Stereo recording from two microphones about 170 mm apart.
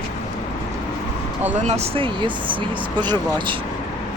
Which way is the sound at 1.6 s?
40° right (ahead or behind).